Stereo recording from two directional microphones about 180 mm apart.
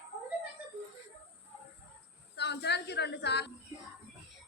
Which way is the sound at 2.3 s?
70° left (ahead or behind).